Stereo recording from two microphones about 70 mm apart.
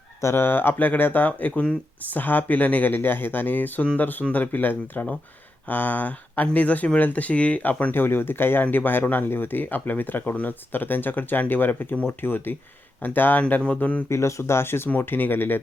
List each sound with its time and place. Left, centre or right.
0.2 s speech: left; by 14.0 s centre
14.1 s speech: left